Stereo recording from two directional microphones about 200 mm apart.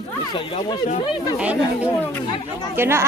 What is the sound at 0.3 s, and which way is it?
Speech, 25° left (ahead or behind).